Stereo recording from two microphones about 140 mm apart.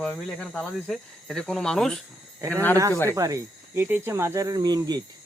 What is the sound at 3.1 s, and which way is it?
Speech, 25° right (ahead or behind).